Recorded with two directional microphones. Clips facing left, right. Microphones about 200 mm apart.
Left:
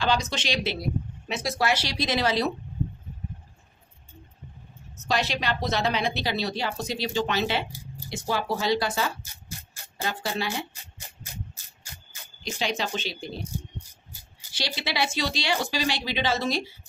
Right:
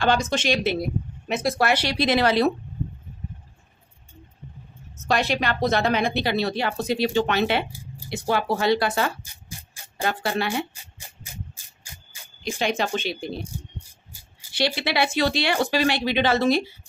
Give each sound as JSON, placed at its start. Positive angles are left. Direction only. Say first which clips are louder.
{"t": 0.0, "sound": "a woman's voice", "louder": "right 5 dB", "side_deg": -50}
{"t": 4.9, "sound": "a woman's voice", "louder": "right 4 dB", "side_deg": -55}
{"t": 11.5, "sound": "rub", "louder": "even", "side_deg": -10}
{"t": 12.4, "sound": "speech", "louder": "right 5 dB", "side_deg": -55}
{"t": 14.5, "sound": "a woman's voice", "louder": "right 7 dB", "side_deg": -60}